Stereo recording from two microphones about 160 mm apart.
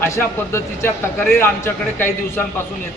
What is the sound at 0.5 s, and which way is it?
A man's voice, 15° left (ahead or behind).